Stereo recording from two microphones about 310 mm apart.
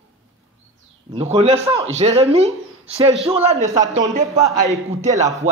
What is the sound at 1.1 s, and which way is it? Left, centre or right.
Speech, centre.